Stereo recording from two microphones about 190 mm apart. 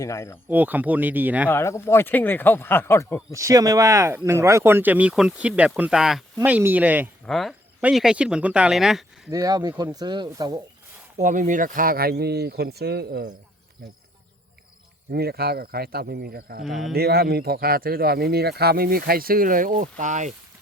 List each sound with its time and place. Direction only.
0.0 s speech: 15° left (ahead or behind)
0.4 s speech: 10° right (ahead or behind)
1.5 s speech: 15° left (ahead or behind)
3.3 s speech: 15° right (ahead or behind); by 9.3 s centre (ahead or behind)
9.3 s speech: 20° right (ahead or behind)
11.2 s speech: 45° right (ahead or behind)
15.1 s speech: 55° right (ahead or behind)
16.6 s speech: centre (ahead or behind)
16.9 s speech: 55° right (ahead or behind)